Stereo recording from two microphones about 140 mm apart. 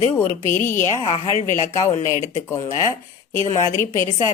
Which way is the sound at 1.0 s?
40° left (ahead or behind).